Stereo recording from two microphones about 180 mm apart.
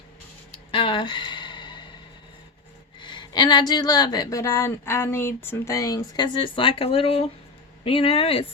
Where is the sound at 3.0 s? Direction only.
25° left (ahead or behind).